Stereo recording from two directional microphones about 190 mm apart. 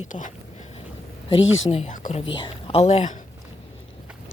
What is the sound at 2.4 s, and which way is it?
Speech, 25° left (ahead or behind).